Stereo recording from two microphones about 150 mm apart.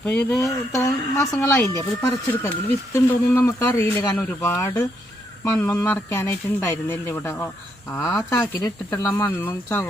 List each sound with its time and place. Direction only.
0.0 s speech: 5° left (ahead or behind)
0.3 s speech: 20° left (ahead or behind)
8.5 s speech: 25° left (ahead or behind)
9.0 s speech: 15° left (ahead or behind)